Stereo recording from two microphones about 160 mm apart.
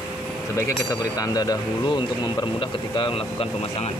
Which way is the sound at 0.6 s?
25° left (ahead or behind).